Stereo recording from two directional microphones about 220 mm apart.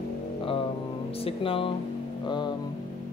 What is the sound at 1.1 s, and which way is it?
Speech, 25° left (ahead or behind).